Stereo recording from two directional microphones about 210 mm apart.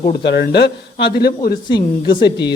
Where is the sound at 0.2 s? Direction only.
55° left (ahead or behind).